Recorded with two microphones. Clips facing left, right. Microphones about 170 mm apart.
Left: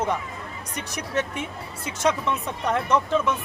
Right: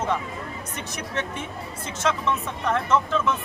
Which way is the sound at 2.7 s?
15° left (ahead or behind).